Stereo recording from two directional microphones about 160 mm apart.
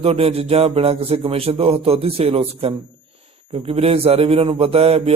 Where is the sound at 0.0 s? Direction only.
40° right (ahead or behind).